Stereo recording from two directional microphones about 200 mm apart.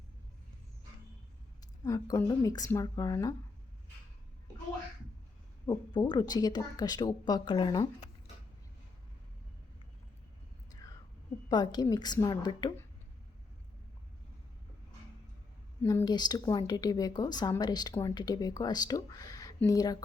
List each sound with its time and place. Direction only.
1.8 s speech: 15° left (ahead or behind)
5.6 s a woman's voice: 20° left (ahead or behind)
11.4 s a woman's voice: 20° left (ahead or behind)
15.8 s a woman's voice: 15° left (ahead or behind)